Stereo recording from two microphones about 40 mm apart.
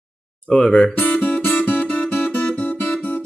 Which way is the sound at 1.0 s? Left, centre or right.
Left.